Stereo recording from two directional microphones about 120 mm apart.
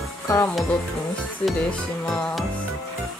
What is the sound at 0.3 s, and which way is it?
Music, 25° left (ahead or behind).